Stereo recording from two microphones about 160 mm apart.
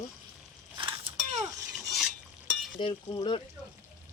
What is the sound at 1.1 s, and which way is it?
Mechanisms, 35° right (ahead or behind).